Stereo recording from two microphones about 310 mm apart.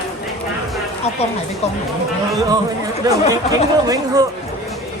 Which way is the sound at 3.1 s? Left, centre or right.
Centre.